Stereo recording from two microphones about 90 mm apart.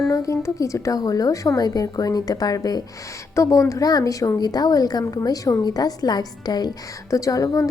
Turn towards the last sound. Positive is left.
turn(degrees=40)  # may be behind; listen again after turning